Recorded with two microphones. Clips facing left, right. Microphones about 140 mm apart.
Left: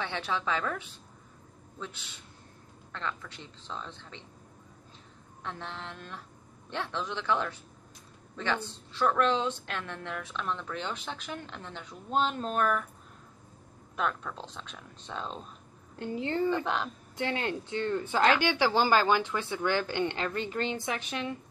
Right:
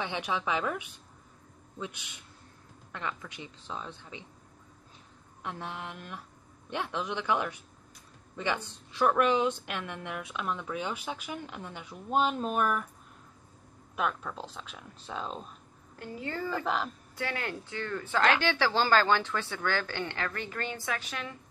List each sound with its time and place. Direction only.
0.0 s a woman's voice: 15° right (ahead or behind)
5.4 s a woman's voice: 10° right (ahead or behind)
13.9 s speech: 5° right (ahead or behind)
16.0 s speech: 25° left (ahead or behind)
16.4 s speech: 5° right (ahead or behind)
17.2 s speech: 25° left (ahead or behind)